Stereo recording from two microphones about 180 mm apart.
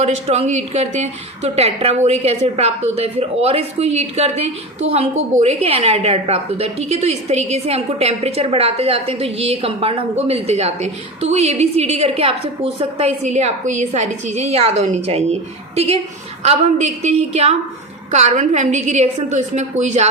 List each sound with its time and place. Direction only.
0.0 s a woman's voice: 35° right (ahead or behind)
16.4 s a woman's voice: 40° right (ahead or behind)